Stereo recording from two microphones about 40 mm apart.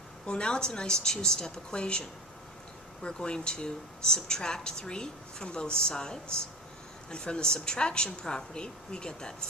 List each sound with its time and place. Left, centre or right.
0.3 s a woman's voice: left